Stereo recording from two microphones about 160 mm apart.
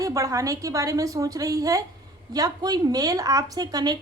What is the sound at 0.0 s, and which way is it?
A woman's voice, 20° right (ahead or behind).